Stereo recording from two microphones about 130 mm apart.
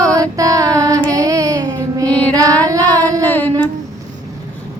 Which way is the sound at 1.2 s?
25° right (ahead or behind).